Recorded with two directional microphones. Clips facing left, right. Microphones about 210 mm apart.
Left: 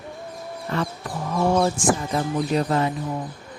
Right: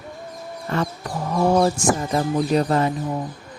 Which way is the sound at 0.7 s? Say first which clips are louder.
Right 2 dB; 45° right (ahead or behind).